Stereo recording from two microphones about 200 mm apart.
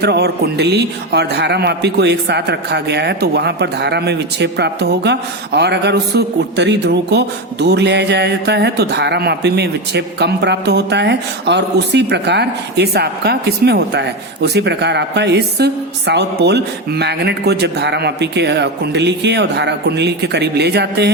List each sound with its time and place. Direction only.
0.0 s a man's voice: 55° right (ahead or behind)